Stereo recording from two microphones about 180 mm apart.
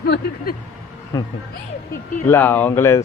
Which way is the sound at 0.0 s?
60° left (ahead or behind).